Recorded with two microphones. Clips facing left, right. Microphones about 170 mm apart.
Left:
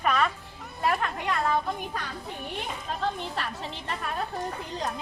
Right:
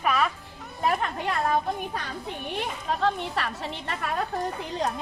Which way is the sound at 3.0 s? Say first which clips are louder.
Right 4 dB; 70° right (ahead or behind).